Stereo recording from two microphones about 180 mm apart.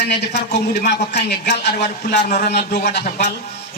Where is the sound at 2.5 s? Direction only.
65° left (ahead or behind).